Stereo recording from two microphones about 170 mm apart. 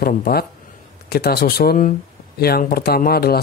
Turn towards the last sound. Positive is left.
turn(degrees=65)  # may be behind; listen again after turning